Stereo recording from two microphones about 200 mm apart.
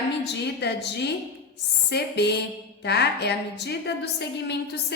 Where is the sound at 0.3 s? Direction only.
55° left (ahead or behind).